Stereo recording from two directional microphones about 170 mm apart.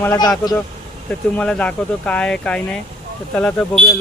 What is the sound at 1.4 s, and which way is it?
Speech, 5° left (ahead or behind).